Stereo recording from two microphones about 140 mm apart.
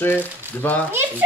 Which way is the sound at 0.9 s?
15° right (ahead or behind).